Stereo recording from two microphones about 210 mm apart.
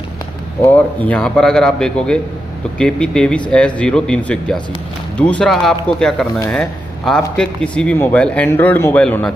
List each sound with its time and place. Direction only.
0.7 s a man's voice: 5° left (ahead or behind)